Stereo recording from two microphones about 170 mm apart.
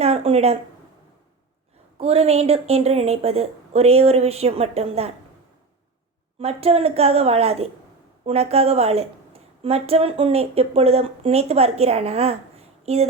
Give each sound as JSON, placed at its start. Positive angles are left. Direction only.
{"t": 0.0, "sound": "a woman's voice", "side_deg": -35}
{"t": 2.0, "sound": "a woman's voice", "side_deg": -35}
{"t": 6.4, "sound": "a woman's voice", "side_deg": -35}